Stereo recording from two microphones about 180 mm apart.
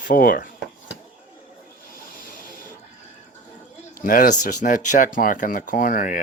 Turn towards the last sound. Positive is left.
turn(degrees=50)  # may be behind; listen again after turning